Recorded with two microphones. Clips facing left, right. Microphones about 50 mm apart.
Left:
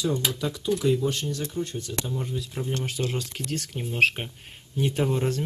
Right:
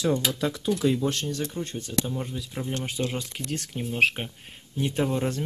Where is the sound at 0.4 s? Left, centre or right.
Right.